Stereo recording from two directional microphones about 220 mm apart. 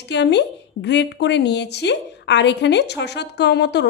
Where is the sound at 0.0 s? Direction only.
50° left (ahead or behind).